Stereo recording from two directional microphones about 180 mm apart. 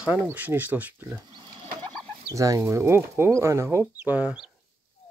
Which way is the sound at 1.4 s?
30° right (ahead or behind).